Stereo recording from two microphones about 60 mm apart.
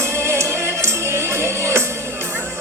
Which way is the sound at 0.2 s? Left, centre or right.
Right.